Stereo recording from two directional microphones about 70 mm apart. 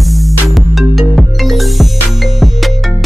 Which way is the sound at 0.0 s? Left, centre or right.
Centre.